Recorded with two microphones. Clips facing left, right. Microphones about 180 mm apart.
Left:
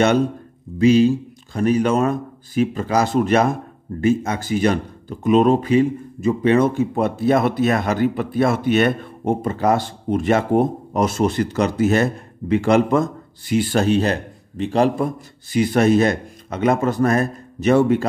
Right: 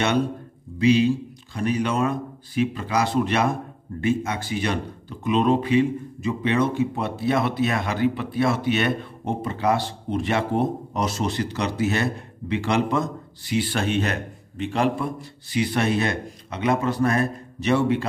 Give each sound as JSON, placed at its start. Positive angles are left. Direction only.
{"t": 0.7, "sound": "speech", "side_deg": 45}